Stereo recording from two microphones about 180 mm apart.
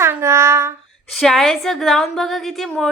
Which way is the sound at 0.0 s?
15° right (ahead or behind).